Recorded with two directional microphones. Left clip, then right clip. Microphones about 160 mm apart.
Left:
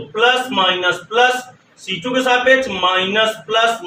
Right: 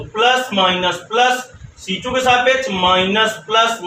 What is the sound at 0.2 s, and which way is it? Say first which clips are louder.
Speech: even; 15° right (ahead or behind).